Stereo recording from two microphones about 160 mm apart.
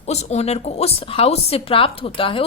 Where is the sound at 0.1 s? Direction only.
45° left (ahead or behind).